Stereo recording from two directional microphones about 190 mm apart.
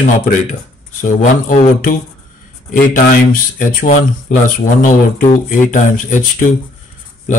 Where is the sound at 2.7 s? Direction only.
45° left (ahead or behind).